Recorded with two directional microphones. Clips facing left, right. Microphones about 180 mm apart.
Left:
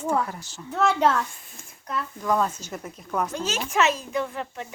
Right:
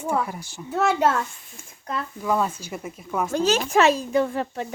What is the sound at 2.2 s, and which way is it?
Speech, 5° right (ahead or behind).